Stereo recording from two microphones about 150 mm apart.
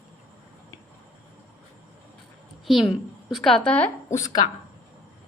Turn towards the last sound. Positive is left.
turn(degrees=25)  # may be behind; listen again after turning